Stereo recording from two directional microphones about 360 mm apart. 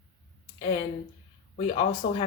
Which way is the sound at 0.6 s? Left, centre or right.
Centre.